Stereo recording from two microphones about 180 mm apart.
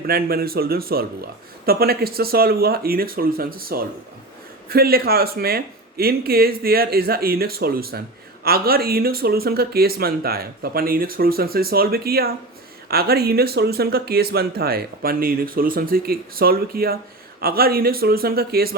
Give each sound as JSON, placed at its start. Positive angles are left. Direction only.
{"t": 0.1, "sound": "speech", "side_deg": -55}